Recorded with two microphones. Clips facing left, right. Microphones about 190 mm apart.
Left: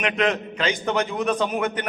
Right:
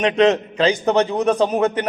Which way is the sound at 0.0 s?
30° right (ahead or behind).